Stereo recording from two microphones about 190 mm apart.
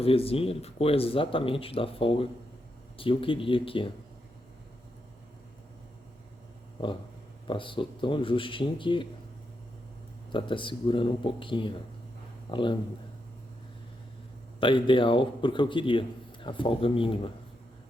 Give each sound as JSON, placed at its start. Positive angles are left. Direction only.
{"t": 0.0, "sound": "a man's voice", "side_deg": 30}
{"t": 7.4, "sound": "a man's voice", "side_deg": 25}
{"t": 10.3, "sound": "a man's voice", "side_deg": 25}
{"t": 14.6, "sound": "a man's voice", "side_deg": 25}